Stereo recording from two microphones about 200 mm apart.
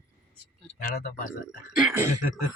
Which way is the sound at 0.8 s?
45° left (ahead or behind).